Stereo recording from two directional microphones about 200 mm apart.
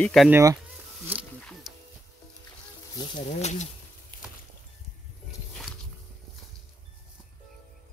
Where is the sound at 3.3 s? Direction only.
35° left (ahead or behind).